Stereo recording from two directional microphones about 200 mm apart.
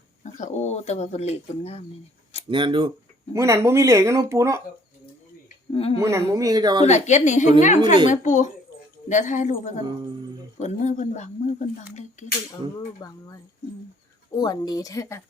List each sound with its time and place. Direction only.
0.2 s speech: 35° left (ahead or behind)
2.5 s speech: 25° right (ahead or behind)
3.3 s speech: 15° right (ahead or behind)
5.7 s a woman's voice: 30° left (ahead or behind)
6.0 s speech: 15° right (ahead or behind)
6.8 s speech: 35° left (ahead or behind)
12.7 s speech: 15° left (ahead or behind)